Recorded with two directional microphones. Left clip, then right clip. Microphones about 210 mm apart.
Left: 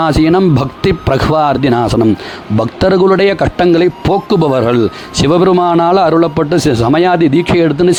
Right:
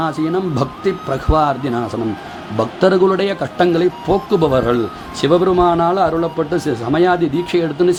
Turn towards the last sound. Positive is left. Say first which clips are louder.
# left 5 dB
turn(degrees=40)  # may be behind; listen again after turning